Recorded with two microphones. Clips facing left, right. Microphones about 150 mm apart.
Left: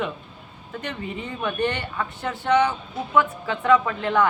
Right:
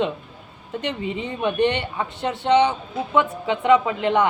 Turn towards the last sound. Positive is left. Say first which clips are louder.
# right 2 dB
turn(degrees=-20)  # may be behind; listen again after turning